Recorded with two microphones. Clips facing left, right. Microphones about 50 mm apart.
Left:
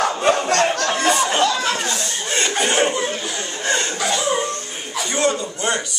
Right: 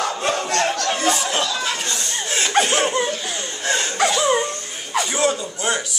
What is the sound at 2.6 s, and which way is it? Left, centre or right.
Laughter, centre.